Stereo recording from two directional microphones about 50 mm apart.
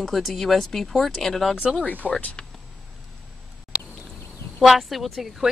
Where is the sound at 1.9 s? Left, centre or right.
Left.